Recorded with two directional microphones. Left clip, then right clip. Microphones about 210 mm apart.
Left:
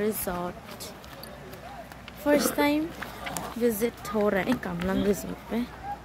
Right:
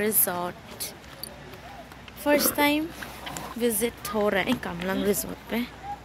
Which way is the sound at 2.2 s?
5° left (ahead or behind).